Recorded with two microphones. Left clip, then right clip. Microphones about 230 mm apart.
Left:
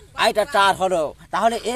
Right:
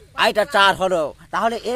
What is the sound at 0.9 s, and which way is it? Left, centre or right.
Speech, right.